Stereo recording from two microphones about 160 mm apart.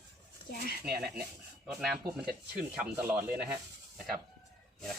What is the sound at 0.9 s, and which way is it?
Speech, 70° right (ahead or behind).